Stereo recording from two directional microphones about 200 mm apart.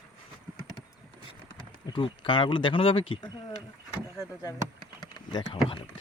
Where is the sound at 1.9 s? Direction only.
25° left (ahead or behind).